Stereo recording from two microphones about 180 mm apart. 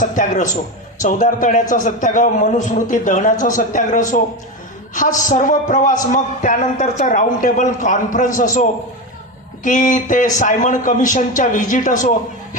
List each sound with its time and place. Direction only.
0.0 s a man's voice: 45° left (ahead or behind)
9.6 s a man's voice: 45° left (ahead or behind)